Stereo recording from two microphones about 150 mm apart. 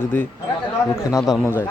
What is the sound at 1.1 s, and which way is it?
Speech, 20° left (ahead or behind).